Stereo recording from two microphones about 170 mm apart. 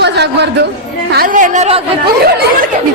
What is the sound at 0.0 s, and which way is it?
Chatter, 80° right.